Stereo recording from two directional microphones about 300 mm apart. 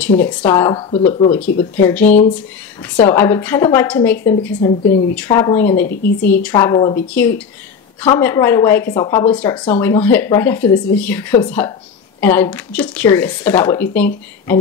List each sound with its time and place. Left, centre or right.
0.2 s speech: centre